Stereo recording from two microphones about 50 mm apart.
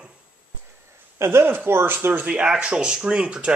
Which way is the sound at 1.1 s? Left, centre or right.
Right.